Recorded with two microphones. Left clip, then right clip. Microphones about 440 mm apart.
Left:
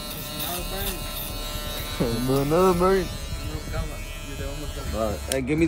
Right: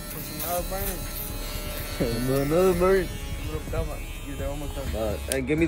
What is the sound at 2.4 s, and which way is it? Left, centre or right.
Speech, centre.